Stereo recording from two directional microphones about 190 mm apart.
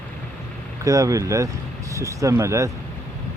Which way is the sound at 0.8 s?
15° right (ahead or behind).